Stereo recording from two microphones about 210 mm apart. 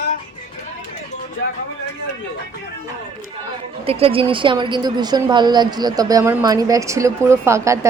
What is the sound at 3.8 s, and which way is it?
A woman's voice, 25° right (ahead or behind).